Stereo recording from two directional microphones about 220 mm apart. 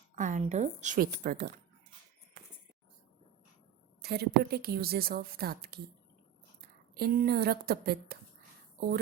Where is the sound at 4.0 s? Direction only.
45° right (ahead or behind).